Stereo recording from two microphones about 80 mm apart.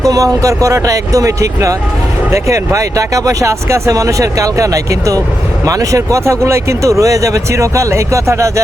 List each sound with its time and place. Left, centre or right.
0.0 s speech: right